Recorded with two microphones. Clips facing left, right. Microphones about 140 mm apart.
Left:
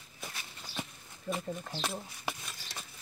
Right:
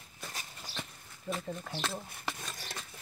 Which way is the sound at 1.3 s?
5° left (ahead or behind).